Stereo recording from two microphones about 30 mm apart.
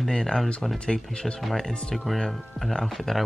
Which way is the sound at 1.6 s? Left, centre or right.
Left.